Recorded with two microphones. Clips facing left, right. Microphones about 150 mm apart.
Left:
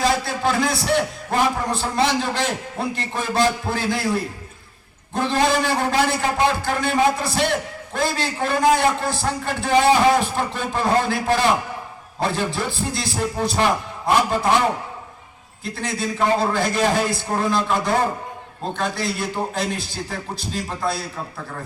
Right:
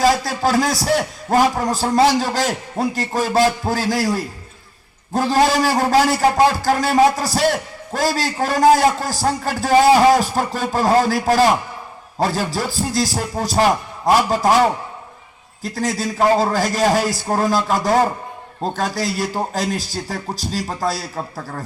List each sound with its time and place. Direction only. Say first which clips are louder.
0.0 s a man's voice: right 4 dB; 40° right (ahead or behind)
15.6 s a man's voice: right 4 dB; 40° right (ahead or behind)